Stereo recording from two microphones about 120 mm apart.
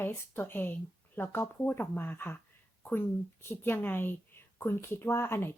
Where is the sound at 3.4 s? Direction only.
20° left (ahead or behind).